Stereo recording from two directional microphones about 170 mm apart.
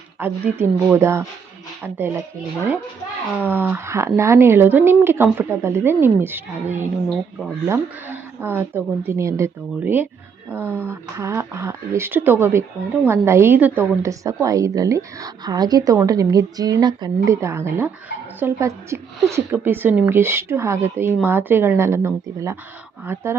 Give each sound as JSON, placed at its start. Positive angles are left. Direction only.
{"t": 0.2, "sound": "a woman's voice", "side_deg": -10}
{"t": 3.4, "sound": "a woman's voice", "side_deg": -10}
{"t": 7.1, "sound": "speech", "side_deg": 0}
{"t": 7.7, "sound": "a woman's voice", "side_deg": -10}